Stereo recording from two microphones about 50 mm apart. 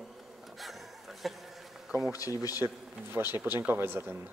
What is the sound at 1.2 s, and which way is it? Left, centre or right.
Speech, centre.